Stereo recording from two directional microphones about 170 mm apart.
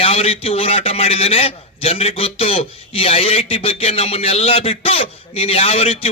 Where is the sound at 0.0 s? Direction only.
35° left (ahead or behind).